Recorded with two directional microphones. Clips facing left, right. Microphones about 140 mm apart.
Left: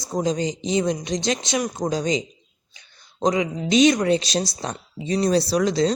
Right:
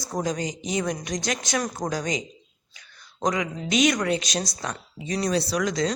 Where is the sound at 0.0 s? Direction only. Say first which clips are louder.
Left 4 dB; 20° left (ahead or behind).